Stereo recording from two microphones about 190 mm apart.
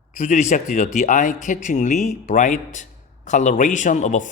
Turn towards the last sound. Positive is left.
turn(degrees=40)  # may be behind; listen again after turning